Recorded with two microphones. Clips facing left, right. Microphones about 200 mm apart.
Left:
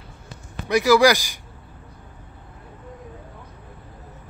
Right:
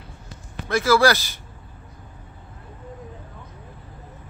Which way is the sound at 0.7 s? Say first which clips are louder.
Left 2 dB; 15° left (ahead or behind).